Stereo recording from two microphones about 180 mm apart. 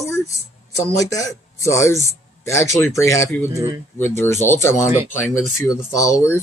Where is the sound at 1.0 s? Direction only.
20° left (ahead or behind).